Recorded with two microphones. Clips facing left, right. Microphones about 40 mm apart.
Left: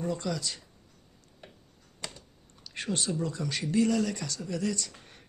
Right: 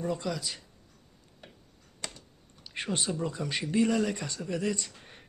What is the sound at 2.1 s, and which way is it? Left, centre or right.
Typing, centre.